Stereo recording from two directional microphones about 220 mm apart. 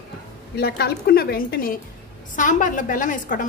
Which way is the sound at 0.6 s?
45° left (ahead or behind).